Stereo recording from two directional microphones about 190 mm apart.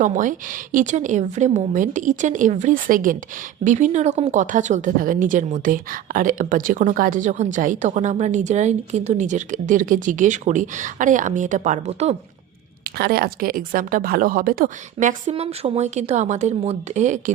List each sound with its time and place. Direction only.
0.0 s speech: 45° right (ahead or behind)
12.8 s speech: 55° right (ahead or behind)